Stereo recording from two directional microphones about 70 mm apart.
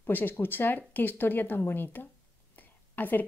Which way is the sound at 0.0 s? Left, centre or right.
Left.